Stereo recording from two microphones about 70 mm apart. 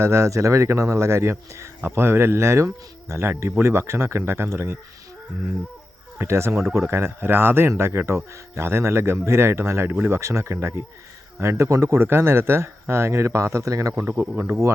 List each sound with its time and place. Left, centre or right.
0.0 s speech: right
6.1 s speech: right